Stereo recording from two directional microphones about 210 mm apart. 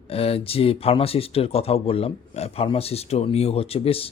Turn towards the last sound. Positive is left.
turn(degrees=25)  # may be behind; listen again after turning